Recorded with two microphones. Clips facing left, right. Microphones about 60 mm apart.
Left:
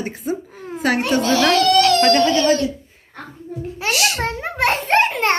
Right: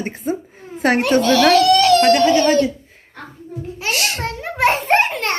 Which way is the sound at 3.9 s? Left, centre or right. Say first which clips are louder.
Left 1 dB; right.